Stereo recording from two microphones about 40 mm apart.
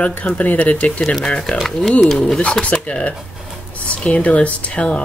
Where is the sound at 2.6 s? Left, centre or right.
Left.